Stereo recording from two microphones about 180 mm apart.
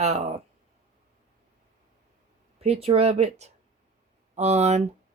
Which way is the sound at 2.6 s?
35° right (ahead or behind).